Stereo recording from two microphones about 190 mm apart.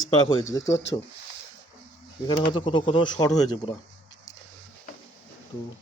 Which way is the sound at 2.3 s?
25° left (ahead or behind).